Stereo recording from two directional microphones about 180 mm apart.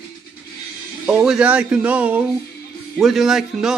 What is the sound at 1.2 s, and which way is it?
A man's voice, 5° right (ahead or behind).